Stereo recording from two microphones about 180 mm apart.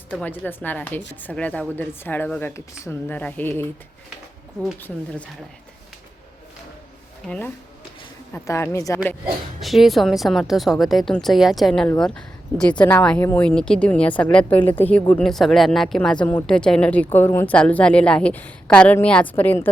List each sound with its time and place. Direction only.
0.1 s speech: 10° left (ahead or behind)
4.8 s speech: 5° left (ahead or behind)
7.3 s speech: 10° left (ahead or behind)
9.6 s a woman's voice: centre (ahead or behind)